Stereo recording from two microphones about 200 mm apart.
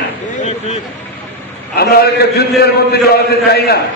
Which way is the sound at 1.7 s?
50° left (ahead or behind).